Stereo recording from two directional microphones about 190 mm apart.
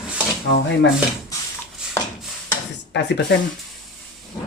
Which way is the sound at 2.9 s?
65° left (ahead or behind).